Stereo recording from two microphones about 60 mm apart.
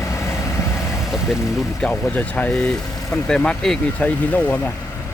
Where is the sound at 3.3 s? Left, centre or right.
Centre.